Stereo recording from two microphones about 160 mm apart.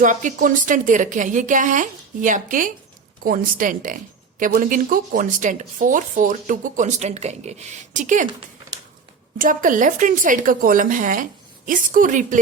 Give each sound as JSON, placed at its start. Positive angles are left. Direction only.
{"t": 0.0, "sound": "speech", "side_deg": -55}
{"t": 9.4, "sound": "speech", "side_deg": -55}